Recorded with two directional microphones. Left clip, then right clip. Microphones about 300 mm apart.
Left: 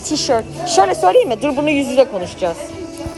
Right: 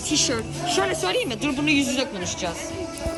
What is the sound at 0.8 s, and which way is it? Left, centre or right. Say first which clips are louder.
A woman's voice: left 15 dB; centre.